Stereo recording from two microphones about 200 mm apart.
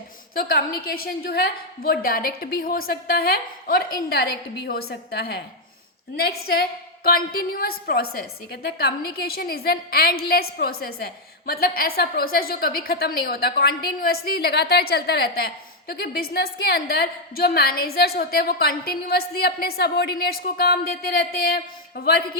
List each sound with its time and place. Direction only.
0.3 s a woman's voice: 50° left (ahead or behind)